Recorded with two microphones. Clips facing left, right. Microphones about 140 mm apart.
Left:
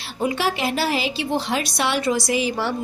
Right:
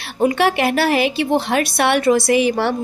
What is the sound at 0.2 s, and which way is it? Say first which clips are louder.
A woman's voice: right 6 dB; 60° right (ahead or behind).